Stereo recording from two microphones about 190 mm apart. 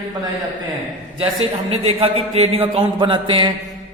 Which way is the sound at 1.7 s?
30° right (ahead or behind).